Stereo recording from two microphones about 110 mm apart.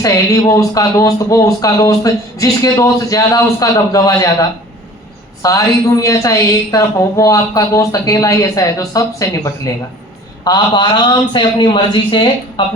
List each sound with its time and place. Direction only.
0.0 s a man's voice: 30° left (ahead or behind)
10.4 s speech: 40° left (ahead or behind)